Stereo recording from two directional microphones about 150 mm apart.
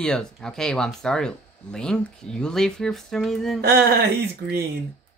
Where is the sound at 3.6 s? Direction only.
90° right.